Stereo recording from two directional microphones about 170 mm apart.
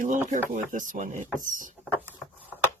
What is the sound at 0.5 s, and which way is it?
Speech, 50° right (ahead or behind).